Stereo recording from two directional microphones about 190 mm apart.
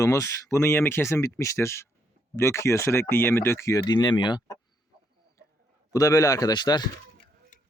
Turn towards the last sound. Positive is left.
turn(degrees=20)  # may be behind; listen again after turning